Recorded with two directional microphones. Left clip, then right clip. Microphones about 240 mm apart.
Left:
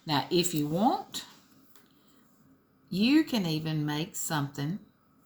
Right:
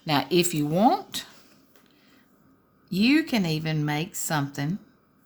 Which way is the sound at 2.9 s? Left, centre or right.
Right.